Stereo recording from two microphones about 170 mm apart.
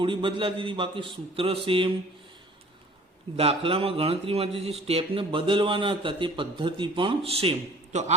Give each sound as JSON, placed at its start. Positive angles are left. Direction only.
{"t": 0.0, "sound": "speech", "side_deg": -30}
{"t": 3.3, "sound": "speech", "side_deg": -35}